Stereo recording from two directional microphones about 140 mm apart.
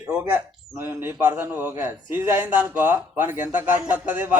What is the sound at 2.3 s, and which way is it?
Speech, 15° right (ahead or behind).